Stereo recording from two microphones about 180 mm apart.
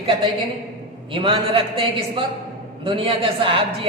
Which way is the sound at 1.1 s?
30° right (ahead or behind).